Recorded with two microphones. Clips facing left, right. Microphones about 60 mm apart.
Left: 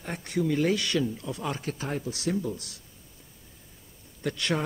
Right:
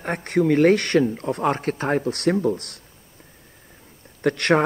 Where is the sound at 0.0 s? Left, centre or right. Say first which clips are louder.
Right 8 dB; right.